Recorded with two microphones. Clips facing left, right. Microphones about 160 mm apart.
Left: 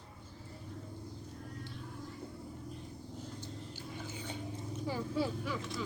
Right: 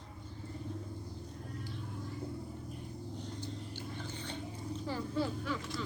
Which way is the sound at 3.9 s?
10° left (ahead or behind).